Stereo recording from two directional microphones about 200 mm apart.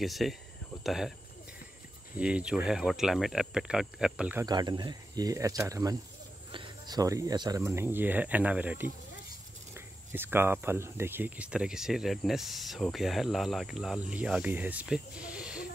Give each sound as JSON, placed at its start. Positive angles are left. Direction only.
{"t": 0.0, "sound": "speech", "side_deg": 0}
{"t": 2.1, "sound": "speech", "side_deg": -5}
{"t": 4.5, "sound": "speech", "side_deg": -20}